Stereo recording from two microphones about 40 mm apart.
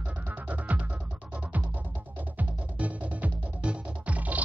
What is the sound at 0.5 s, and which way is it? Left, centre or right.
Music, right.